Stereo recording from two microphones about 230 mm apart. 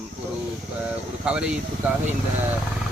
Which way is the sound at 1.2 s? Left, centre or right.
Centre.